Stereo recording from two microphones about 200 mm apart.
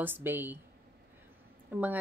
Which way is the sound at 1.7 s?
10° right (ahead or behind).